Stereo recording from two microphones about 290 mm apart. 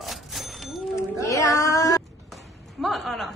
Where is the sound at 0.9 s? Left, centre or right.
Centre.